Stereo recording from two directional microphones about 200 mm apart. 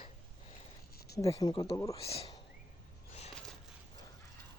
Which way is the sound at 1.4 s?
20° left (ahead or behind).